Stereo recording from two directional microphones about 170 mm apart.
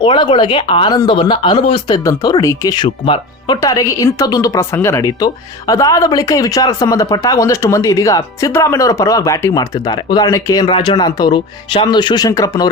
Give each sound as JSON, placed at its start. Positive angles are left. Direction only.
{"t": 0.0, "sound": "speech", "side_deg": 30}